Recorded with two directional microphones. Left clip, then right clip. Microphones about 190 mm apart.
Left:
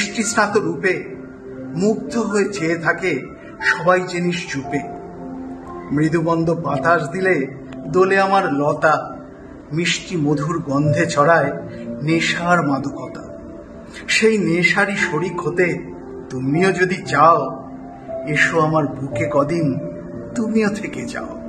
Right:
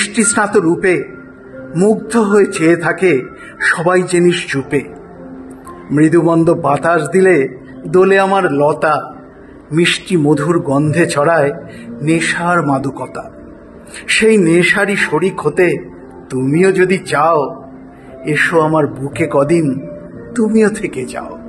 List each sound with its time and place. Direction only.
0.0 s a man's voice: 40° right (ahead or behind)
5.9 s a man's voice: 40° right (ahead or behind); by 21.4 s 20° right (ahead or behind)